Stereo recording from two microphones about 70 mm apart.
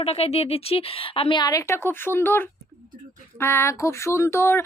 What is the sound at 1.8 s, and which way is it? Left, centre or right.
Speech, left.